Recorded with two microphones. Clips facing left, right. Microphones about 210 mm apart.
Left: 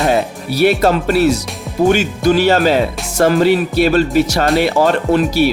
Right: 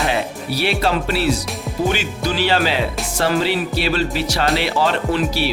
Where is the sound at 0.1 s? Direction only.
45° left (ahead or behind).